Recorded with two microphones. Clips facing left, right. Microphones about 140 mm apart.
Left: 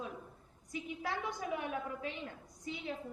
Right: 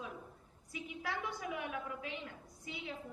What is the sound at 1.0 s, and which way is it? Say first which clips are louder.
A woman's voice: left 1 dB; 35° left (ahead or behind).